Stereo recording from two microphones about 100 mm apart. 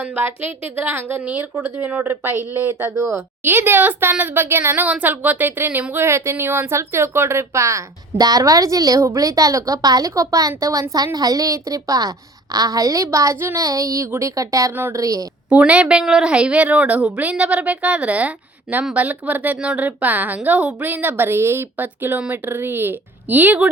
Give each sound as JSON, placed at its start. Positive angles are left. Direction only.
{"t": 0.0, "sound": "a woman's voice", "side_deg": -15}
{"t": 13.6, "sound": "a woman's voice", "side_deg": -35}
{"t": 14.7, "sound": "a woman's voice", "side_deg": -20}
{"t": 15.0, "sound": "a woman's voice", "side_deg": -35}
{"t": 15.4, "sound": "a woman's voice", "side_deg": -15}